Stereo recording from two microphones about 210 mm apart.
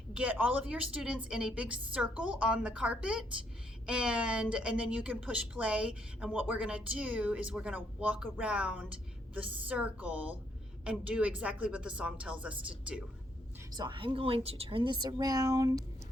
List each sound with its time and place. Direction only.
0.1 s speech: 5° right (ahead or behind)
13.7 s a woman's voice: 20° right (ahead or behind)